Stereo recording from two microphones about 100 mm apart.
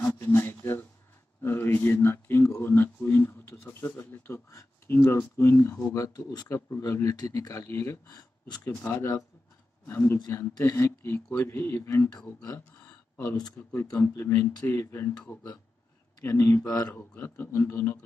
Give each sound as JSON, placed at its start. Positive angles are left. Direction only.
{"t": 0.0, "sound": "a sound", "side_deg": 30}
{"t": 0.4, "sound": "a sound", "side_deg": 20}
{"t": 1.4, "sound": "speech", "side_deg": 20}
{"t": 9.8, "sound": "speech", "side_deg": 25}
{"t": 13.6, "sound": "speech", "side_deg": 20}
{"t": 16.2, "sound": "speech", "side_deg": 30}